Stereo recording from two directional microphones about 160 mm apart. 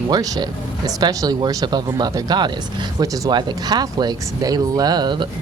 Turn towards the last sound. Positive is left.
turn(degrees=-30)  # may be behind; listen again after turning